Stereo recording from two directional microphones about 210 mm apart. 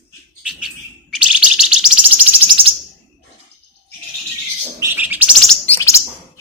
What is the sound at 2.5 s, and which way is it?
Bird, 25° right (ahead or behind).